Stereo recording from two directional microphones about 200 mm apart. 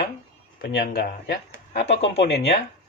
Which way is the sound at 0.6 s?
50° left (ahead or behind).